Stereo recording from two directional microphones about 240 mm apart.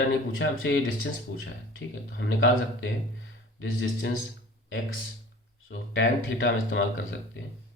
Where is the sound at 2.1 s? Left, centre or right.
Left.